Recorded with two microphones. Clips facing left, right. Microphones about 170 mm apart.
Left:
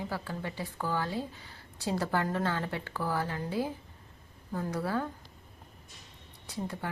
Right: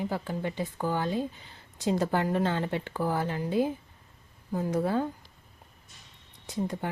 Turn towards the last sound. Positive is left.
turn(degrees=-20)  # may be behind; listen again after turning